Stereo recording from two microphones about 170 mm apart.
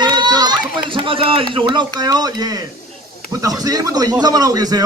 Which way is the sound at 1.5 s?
25° right (ahead or behind).